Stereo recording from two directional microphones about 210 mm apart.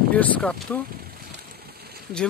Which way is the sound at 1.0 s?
45° right (ahead or behind).